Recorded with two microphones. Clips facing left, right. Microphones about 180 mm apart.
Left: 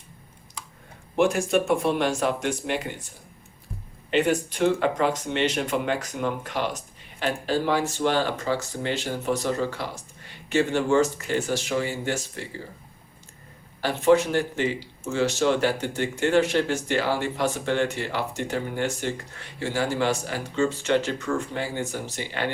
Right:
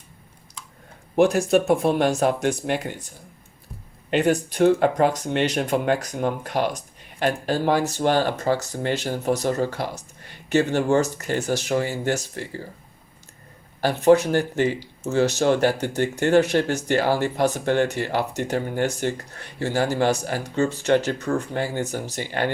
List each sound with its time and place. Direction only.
1.1 s speech: 40° right (ahead or behind)
4.1 s speech: 40° right (ahead or behind)
13.8 s speech: 40° right (ahead or behind)